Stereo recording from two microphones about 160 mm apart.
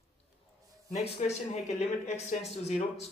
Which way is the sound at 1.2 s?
45° left (ahead or behind).